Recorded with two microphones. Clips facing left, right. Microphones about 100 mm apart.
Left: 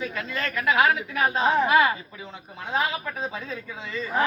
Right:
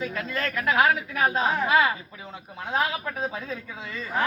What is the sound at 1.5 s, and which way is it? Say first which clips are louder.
Speech: left 4 dB; 15° left (ahead or behind).